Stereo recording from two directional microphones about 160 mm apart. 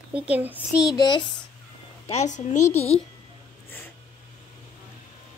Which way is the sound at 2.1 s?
45° left (ahead or behind).